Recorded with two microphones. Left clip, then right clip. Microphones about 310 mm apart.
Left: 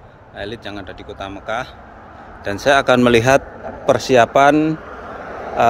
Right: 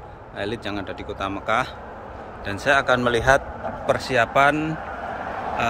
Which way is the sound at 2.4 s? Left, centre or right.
Centre.